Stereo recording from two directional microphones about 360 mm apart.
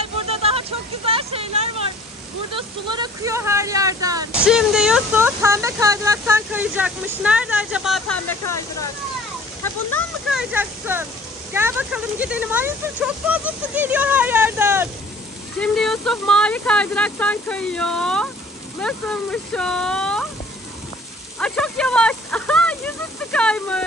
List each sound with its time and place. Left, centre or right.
0.0 s vehicle: centre
4.3 s speech: centre
9.9 s speech: centre
21.4 s a sound: centre
23.3 s speech: centre